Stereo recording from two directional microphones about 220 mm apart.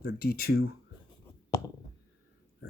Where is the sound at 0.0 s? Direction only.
40° left (ahead or behind).